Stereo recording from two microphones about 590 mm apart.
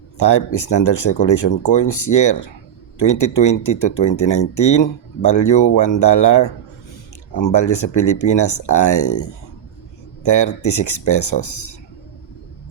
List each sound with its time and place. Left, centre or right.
0.2 s speech: left
10.2 s speech: left